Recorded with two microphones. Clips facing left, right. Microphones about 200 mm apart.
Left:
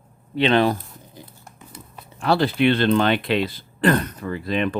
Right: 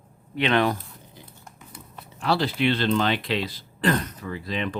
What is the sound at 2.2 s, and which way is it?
Speech, 55° left (ahead or behind).